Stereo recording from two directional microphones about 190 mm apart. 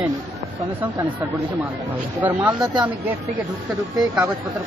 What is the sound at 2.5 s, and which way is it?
Speech, 25° right (ahead or behind).